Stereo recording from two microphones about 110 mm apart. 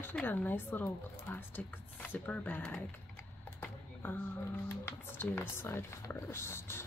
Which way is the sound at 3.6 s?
15° left (ahead or behind).